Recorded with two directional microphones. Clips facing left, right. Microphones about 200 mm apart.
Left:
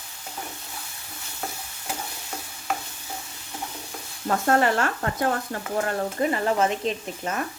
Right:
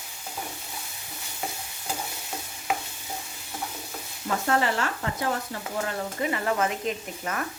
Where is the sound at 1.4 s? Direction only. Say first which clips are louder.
Even; 5° right (ahead or behind).